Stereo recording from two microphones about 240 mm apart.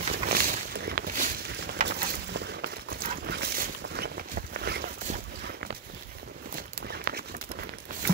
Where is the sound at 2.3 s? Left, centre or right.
Right.